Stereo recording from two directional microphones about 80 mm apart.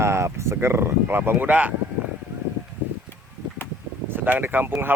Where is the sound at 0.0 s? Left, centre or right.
Right; by 1.7 s centre.